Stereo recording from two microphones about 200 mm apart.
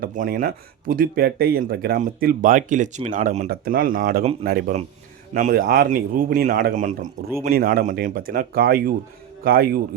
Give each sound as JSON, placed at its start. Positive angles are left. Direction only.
{"t": 0.0, "sound": "a man's voice", "side_deg": -45}